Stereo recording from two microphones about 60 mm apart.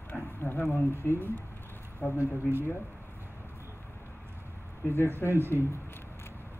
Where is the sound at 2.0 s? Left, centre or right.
Left.